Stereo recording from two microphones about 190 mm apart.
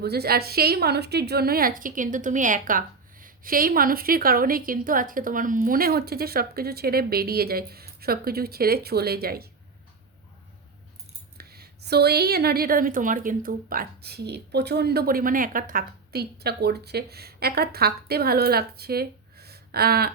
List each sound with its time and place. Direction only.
0.0 s a woman's voice: 55° right (ahead or behind)
11.3 s a woman's voice: 55° right (ahead or behind)